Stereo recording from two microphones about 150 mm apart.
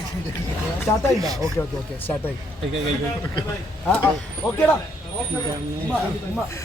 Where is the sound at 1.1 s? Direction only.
25° right (ahead or behind).